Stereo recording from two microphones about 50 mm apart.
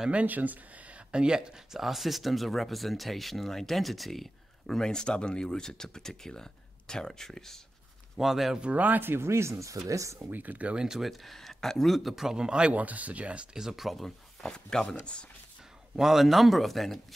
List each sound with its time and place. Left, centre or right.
0.1 s speech: right; by 1.8 s centre
1.8 s speech: centre
8.2 s speech: centre
8.5 s speech: right
9.0 s speech: right
10.3 s speech: right
10.9 s speech: centre
12.3 s speech: centre
12.7 s speech: right
13.6 s speech: centre
14.5 s speech: centre
16.0 s speech: centre